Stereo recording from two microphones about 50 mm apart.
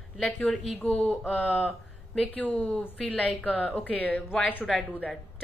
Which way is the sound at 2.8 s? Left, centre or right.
Left.